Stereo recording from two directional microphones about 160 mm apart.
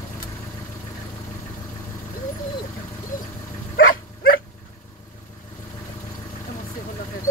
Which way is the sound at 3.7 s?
65° left (ahead or behind).